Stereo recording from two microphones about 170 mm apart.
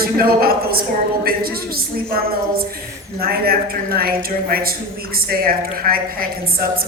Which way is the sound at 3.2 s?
60° right (ahead or behind).